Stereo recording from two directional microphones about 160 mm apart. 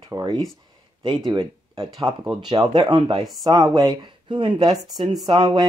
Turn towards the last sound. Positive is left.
turn(degrees=-25)  # may be behind; listen again after turning